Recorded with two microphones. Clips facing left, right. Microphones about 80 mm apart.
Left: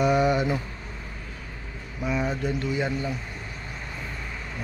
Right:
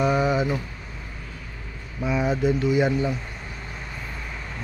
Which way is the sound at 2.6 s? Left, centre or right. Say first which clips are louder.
Right 6 dB; centre.